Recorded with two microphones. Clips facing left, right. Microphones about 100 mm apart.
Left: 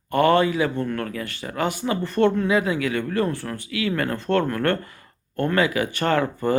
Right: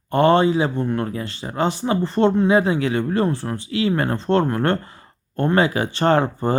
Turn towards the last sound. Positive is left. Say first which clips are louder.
# right 3 dB
turn(degrees=-30)  # may be behind; listen again after turning